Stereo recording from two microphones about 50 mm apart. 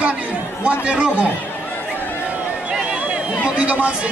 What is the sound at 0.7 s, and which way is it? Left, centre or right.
Speech, centre.